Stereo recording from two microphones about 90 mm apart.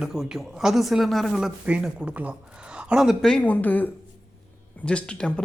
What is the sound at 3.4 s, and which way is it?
Speech, 20° left (ahead or behind).